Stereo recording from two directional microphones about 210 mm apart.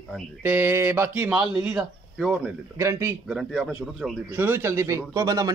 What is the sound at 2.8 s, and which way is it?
A man's voice, 10° right (ahead or behind).